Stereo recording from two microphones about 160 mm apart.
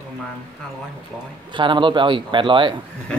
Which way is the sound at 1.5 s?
30° right (ahead or behind).